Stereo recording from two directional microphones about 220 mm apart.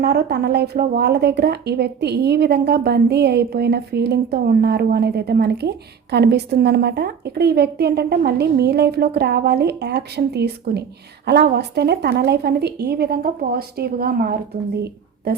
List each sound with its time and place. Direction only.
0.0 s speech: 45° right (ahead or behind)